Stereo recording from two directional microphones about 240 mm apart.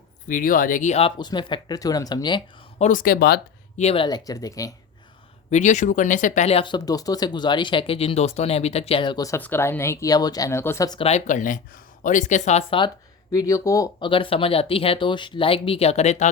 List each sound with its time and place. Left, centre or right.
0.3 s speech: left
3.8 s speech: left
5.5 s speech: left